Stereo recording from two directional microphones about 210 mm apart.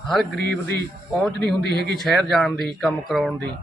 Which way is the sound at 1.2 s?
5° left (ahead or behind).